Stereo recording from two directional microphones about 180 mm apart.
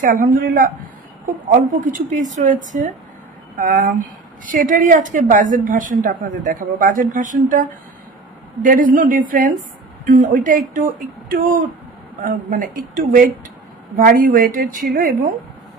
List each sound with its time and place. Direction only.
0.0 s a woman's voice: 50° right (ahead or behind)
8.6 s a woman's voice: 50° right (ahead or behind)